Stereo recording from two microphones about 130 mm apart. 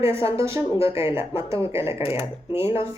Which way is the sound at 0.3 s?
20° right (ahead or behind).